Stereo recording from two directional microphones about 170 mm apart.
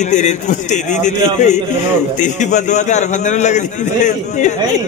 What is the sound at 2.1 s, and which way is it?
A man's voice, 45° left (ahead or behind).